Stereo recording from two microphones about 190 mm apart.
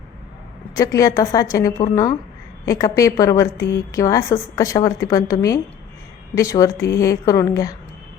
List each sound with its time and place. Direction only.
0.8 s a woman's voice: 20° left (ahead or behind)